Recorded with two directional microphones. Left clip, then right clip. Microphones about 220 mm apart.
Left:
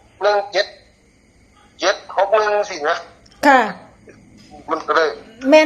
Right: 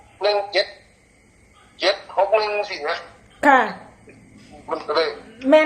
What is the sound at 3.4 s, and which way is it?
Speech, 25° left (ahead or behind).